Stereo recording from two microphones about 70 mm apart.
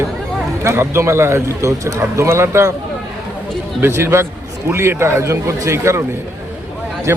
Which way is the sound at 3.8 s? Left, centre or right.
Right.